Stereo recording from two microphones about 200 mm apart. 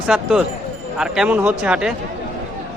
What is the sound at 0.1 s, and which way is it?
Speech, 5° right (ahead or behind).